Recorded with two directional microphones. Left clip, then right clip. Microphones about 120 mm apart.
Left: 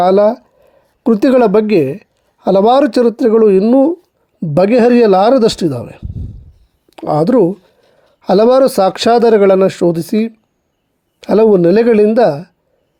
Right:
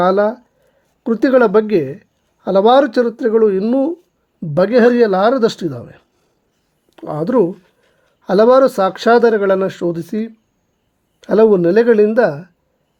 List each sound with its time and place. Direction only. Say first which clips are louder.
0.0 s a woman's voice: left 4 dB; 30° left (ahead or behind)
4.5 s a woman's voice: left 2 dB; 35° left (ahead or behind)
12.0 s speech: left 3 dB; 20° left (ahead or behind)